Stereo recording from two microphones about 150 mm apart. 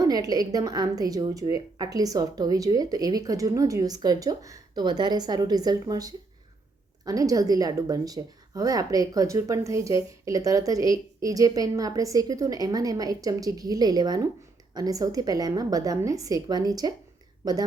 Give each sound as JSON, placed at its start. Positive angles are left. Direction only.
{"t": 0.0, "sound": "a woman's voice", "side_deg": -25}